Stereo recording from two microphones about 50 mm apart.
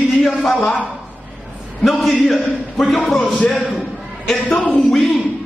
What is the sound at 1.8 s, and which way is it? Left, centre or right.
A man's voice, centre.